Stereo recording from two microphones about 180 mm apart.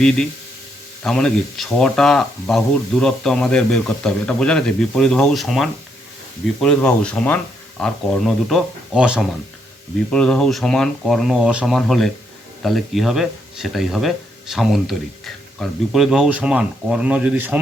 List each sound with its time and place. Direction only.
1.0 s speech: centre (ahead or behind)